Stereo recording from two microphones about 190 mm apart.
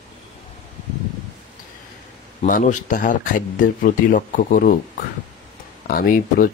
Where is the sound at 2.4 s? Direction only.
45° left (ahead or behind).